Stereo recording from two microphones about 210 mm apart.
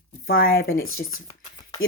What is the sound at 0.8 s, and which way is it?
Speech, 75° left (ahead or behind).